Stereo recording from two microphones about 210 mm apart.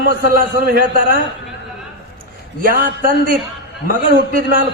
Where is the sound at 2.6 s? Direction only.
40° right (ahead or behind).